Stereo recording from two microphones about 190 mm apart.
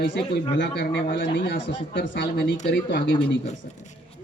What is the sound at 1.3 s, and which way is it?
Speech, 70° left (ahead or behind).